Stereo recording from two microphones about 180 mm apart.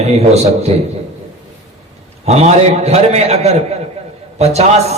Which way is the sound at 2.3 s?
35° right (ahead or behind).